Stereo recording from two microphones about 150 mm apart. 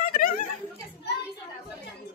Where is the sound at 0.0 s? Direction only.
75° left (ahead or behind).